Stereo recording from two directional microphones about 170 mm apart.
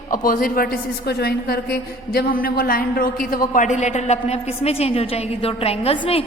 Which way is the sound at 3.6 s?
45° left (ahead or behind).